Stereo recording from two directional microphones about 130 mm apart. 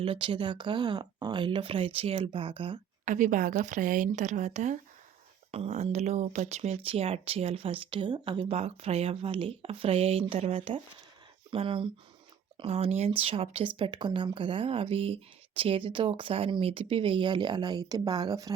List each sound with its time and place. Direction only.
0.0 s speech: 40° right (ahead or behind)
3.0 s a woman's voice: 75° right (ahead or behind)
5.5 s speech: 50° right (ahead or behind); by 18.5 s 25° right (ahead or behind)